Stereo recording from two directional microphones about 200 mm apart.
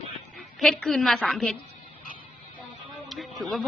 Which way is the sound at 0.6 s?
Centre (ahead or behind).